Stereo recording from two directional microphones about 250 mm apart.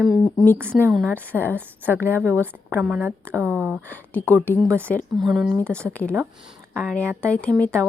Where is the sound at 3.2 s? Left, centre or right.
Centre.